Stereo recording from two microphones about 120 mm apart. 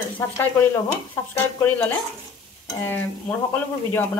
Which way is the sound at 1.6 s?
15° left (ahead or behind).